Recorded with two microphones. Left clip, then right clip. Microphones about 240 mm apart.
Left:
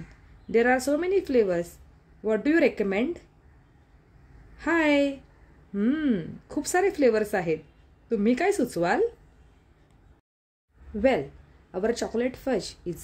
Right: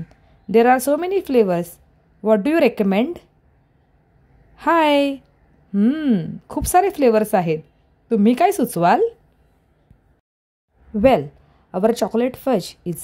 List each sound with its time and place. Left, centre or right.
0.1 s a woman's voice: right
4.6 s speech: right
11.0 s speech: right